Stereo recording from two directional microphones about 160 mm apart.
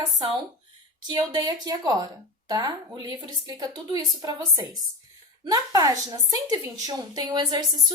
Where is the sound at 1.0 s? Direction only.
25° right (ahead or behind).